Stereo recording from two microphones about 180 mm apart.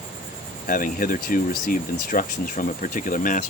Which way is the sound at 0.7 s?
50° left (ahead or behind).